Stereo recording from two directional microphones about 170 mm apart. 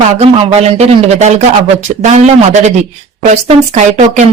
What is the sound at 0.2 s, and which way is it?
A woman's voice, 35° right (ahead or behind).